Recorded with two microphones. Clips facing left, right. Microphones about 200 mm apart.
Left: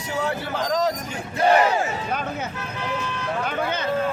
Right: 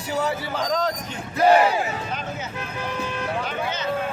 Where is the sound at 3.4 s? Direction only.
55° left (ahead or behind).